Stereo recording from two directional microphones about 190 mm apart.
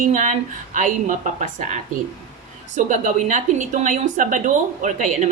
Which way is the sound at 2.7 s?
40° right (ahead or behind).